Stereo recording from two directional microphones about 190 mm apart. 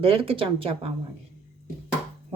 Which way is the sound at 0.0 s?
30° right (ahead or behind).